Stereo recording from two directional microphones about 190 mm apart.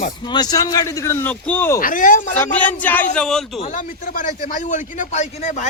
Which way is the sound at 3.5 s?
35° left (ahead or behind).